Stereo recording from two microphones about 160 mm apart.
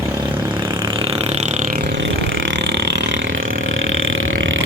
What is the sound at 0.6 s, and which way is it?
Vehicle, 25° right (ahead or behind).